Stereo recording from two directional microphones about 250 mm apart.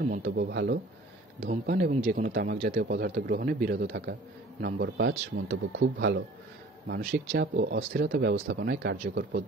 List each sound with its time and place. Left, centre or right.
0.1 s a man's voice: right
3.8 s a man's voice: right